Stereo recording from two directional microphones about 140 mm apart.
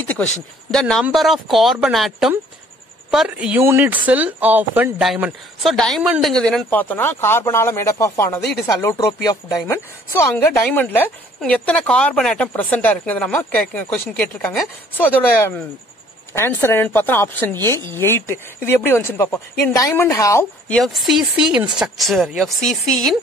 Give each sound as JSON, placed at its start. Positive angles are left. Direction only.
{"t": 0.2, "sound": "speech", "side_deg": 5}
{"t": 5.0, "sound": "a woman's voice", "side_deg": 0}
{"t": 20.6, "sound": "speech", "side_deg": 5}